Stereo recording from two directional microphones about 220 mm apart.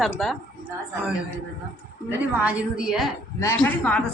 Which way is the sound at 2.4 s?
5° right (ahead or behind).